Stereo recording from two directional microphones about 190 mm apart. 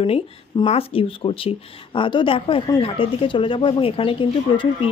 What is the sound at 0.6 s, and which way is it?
Speech, 30° left (ahead or behind).